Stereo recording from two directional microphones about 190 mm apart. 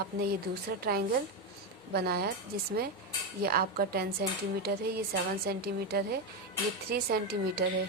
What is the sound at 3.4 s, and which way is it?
A woman's voice, 50° right (ahead or behind).